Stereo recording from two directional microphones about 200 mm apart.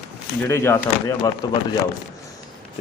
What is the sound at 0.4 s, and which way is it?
Speech, 15° left (ahead or behind).